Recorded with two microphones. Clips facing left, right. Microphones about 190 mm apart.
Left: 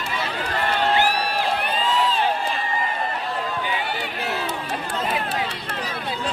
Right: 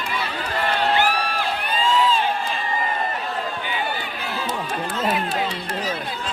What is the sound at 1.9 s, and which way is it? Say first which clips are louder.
Crowd: right 4 dB; 65° left (ahead or behind).